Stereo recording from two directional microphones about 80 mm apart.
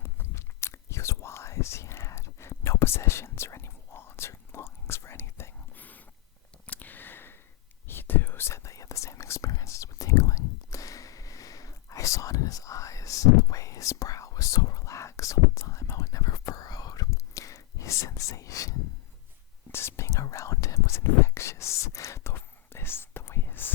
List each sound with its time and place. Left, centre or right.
0.0 s whispering: left
5.8 s a sound: left
7.9 s whispering: left
19.7 s whispering: left